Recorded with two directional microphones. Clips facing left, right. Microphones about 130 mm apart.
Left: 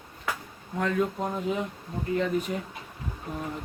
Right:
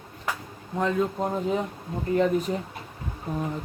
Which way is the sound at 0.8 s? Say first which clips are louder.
Right 2 dB; 20° right (ahead or behind).